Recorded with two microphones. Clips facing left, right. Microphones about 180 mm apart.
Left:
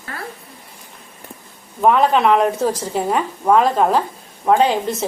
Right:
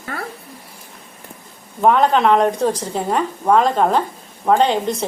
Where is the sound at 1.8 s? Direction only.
Centre (ahead or behind).